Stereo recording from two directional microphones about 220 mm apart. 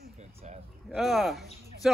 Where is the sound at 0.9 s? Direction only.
Centre (ahead or behind).